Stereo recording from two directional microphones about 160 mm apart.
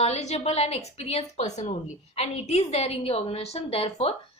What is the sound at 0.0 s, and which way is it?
A woman's voice, 40° left (ahead or behind).